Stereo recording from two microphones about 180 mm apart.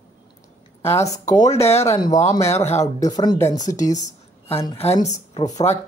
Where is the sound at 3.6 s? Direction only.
45° left (ahead or behind).